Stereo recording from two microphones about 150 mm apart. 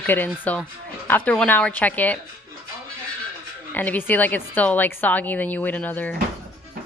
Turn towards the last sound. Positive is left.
turn(degrees=10)  # may be behind; listen again after turning